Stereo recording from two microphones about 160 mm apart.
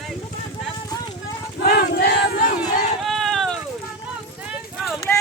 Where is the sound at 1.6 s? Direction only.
75° left (ahead or behind).